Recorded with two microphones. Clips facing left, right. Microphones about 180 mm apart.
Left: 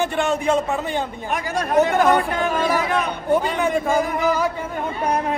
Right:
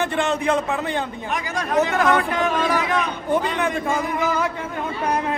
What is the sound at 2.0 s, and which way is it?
Speech, 35° left (ahead or behind).